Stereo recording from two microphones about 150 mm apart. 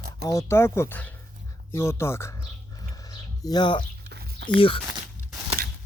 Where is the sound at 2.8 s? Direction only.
25° left (ahead or behind).